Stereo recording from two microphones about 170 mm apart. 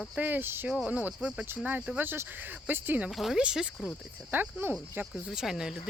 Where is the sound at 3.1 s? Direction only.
Centre (ahead or behind).